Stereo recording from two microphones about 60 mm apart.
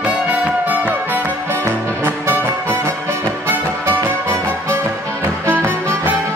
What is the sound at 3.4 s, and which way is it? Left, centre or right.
Music, right.